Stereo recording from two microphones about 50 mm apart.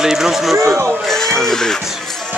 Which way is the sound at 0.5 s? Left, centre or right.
Right.